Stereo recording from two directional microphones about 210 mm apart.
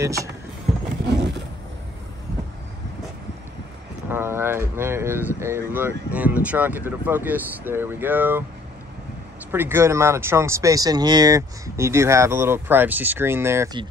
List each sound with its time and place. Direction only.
0.0 s speech: 15° right (ahead or behind)
1.0 s a sound: 55° right (ahead or behind)
4.1 s speech: 10° right (ahead or behind)
9.5 s speech: 10° right (ahead or behind)